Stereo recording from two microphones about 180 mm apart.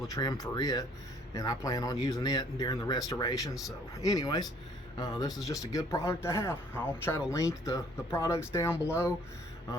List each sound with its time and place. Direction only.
0.1 s speech: 20° left (ahead or behind)